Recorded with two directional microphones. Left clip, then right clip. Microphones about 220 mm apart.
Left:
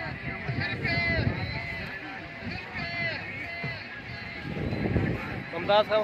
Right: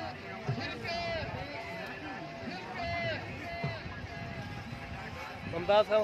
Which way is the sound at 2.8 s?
40° right (ahead or behind).